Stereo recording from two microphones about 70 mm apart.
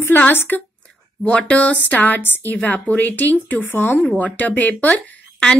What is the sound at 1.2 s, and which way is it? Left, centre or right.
Speech, centre.